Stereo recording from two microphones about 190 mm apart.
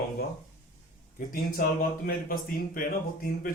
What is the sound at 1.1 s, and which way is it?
A man's voice, 50° left (ahead or behind).